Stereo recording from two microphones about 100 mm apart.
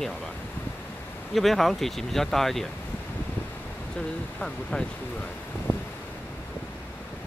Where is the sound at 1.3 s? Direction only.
Centre (ahead or behind).